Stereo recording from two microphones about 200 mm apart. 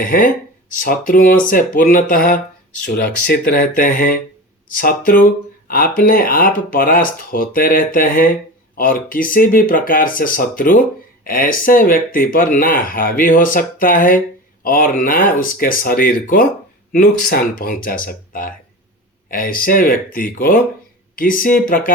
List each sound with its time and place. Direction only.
0.0 s speech: 45° left (ahead or behind)